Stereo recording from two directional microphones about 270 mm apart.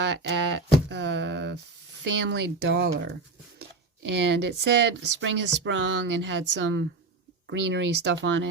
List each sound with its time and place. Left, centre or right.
0.0 s speech: right
0.9 s a sound: right
2.0 s speech: right
4.1 s speech: right